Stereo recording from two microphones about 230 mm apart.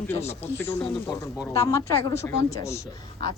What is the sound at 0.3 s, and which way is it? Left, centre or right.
A woman's voice, centre.